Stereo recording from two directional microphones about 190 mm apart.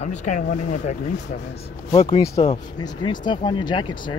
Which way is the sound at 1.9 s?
25° left (ahead or behind).